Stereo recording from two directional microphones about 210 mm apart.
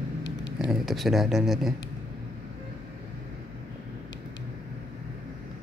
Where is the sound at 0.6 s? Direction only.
Centre (ahead or behind).